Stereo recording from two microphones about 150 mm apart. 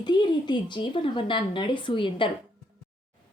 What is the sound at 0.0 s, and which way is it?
A woman's voice, 30° left (ahead or behind).